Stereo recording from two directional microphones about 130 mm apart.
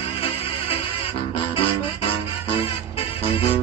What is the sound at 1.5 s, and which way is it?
Music, 45° left (ahead or behind).